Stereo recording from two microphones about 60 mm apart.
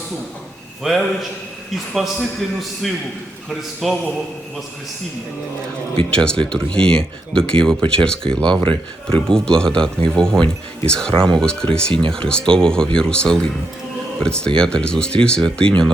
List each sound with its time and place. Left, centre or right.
0.9 s a man's voice: centre
6.1 s speech: centre